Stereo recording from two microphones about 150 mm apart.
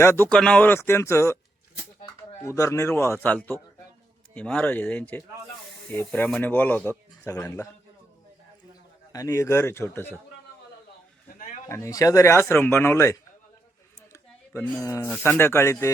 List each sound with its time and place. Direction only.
0.0 s speech: 20° left (ahead or behind)
0.3 s speech: 5° left (ahead or behind)
2.4 s speech: 20° left (ahead or behind)
9.1 s speech: 20° left (ahead or behind)
11.7 s speech: 20° left (ahead or behind)
14.1 s a sound: 20° left (ahead or behind)
15.2 s speech: 15° left (ahead or behind)